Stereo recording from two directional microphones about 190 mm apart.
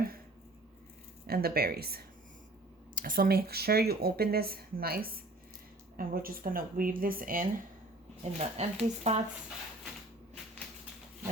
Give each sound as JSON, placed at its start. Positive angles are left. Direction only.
{"t": 1.3, "sound": "speech", "side_deg": -55}
{"t": 8.2, "sound": "speech", "side_deg": -35}